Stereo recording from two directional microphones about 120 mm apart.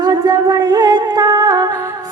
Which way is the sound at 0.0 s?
35° right (ahead or behind).